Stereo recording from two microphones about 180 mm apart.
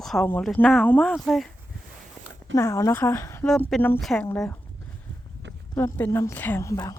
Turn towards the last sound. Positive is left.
turn(degrees=15)  # may be behind; listen again after turning